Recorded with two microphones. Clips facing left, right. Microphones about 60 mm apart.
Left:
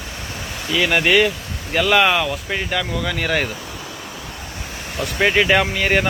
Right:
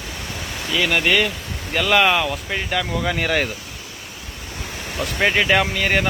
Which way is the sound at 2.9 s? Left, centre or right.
Centre.